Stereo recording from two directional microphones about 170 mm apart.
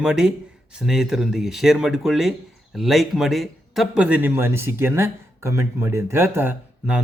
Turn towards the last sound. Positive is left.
turn(degrees=-10)  # may be behind; listen again after turning